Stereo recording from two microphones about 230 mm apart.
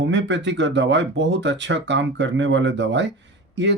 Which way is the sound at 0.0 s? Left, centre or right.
Right.